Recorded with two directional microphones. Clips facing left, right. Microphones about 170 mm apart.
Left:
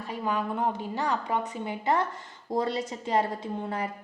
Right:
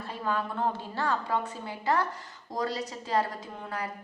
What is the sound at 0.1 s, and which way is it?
A woman's voice, 15° left (ahead or behind).